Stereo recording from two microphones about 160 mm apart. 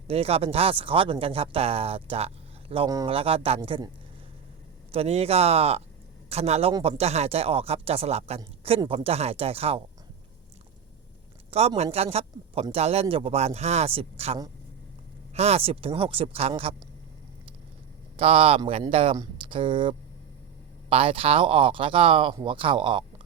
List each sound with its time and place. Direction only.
0.1 s speech: 40° right (ahead or behind)
4.9 s a man's voice: 40° right (ahead or behind)
8.8 s speech: 25° right (ahead or behind)
9.0 s speech: 40° right (ahead or behind)
11.8 s speech: 40° right (ahead or behind)
18.2 s speech: 35° right (ahead or behind)
19.1 s a sound: 20° right (ahead or behind)
19.5 s speech: 30° right (ahead or behind)